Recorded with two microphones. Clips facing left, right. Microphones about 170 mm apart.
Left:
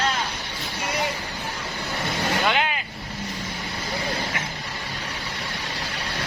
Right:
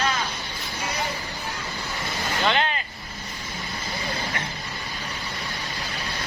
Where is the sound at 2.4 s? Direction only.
10° left (ahead or behind).